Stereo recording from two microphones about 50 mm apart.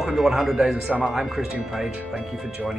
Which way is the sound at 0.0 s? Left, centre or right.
Centre.